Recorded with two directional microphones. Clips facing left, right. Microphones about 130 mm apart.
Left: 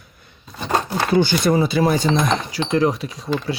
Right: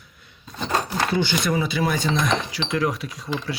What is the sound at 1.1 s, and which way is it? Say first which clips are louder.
Speech: left 7 dB; 40° left (ahead or behind).